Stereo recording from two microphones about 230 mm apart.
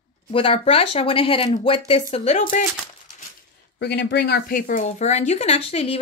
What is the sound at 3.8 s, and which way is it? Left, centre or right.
Speech, left.